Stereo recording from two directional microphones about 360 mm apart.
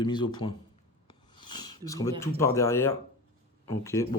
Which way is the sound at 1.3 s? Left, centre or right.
Centre.